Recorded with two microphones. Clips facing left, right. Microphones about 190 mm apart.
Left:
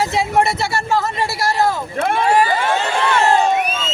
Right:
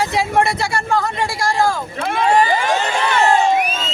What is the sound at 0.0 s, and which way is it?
Speech, centre (ahead or behind).